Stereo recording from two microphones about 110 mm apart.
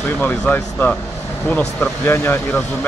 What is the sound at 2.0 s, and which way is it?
Speech, 20° left (ahead or behind).